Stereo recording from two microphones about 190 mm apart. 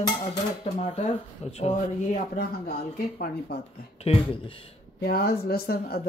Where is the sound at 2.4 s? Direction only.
50° left (ahead or behind).